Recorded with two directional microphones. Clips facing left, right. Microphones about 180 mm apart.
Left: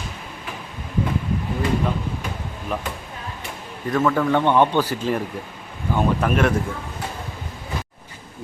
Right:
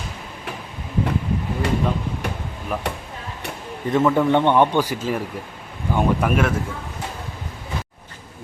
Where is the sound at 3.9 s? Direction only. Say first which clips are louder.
Right 2 dB; 20° right (ahead or behind).